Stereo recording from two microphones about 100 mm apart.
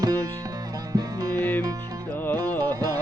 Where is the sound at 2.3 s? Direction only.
20° left (ahead or behind).